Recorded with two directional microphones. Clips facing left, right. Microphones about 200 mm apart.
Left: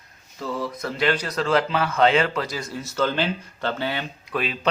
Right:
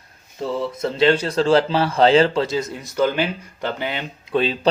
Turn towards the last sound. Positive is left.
turn(degrees=-25)  # may be behind; listen again after turning